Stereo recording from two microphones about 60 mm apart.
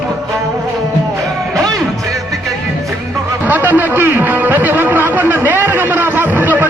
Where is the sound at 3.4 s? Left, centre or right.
Right.